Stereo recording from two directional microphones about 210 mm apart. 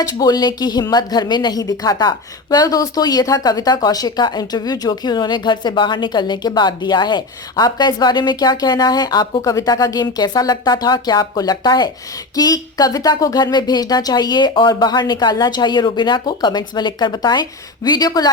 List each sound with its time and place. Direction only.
0.0 s speech: 15° left (ahead or behind)